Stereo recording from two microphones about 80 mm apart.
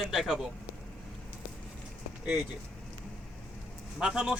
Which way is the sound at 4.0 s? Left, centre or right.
Centre.